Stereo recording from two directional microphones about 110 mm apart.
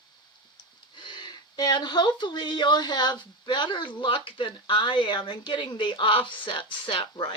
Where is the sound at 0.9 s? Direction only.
45° left (ahead or behind).